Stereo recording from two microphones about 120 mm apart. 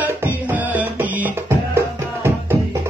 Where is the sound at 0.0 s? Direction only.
15° right (ahead or behind).